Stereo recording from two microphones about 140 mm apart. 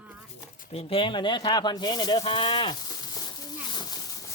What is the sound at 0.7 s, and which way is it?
Speech, 45° left (ahead or behind).